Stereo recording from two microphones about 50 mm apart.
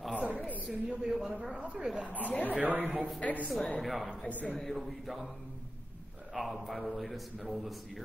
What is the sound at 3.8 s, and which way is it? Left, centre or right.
A man's voice, centre.